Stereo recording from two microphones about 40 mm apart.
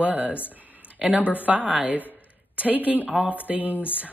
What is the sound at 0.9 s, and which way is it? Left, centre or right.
Speech, right.